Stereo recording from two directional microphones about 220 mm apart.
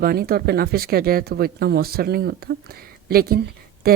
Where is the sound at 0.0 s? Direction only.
45° right (ahead or behind).